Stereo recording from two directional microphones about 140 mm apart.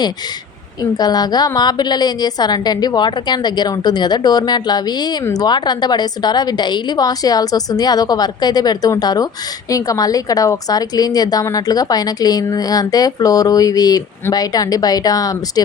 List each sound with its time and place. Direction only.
0.8 s a woman's voice: 30° left (ahead or behind)